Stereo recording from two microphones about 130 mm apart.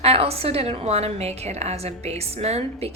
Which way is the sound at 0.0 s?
50° right (ahead or behind).